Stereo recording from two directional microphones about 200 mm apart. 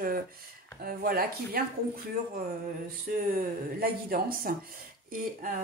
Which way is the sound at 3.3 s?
45° right (ahead or behind).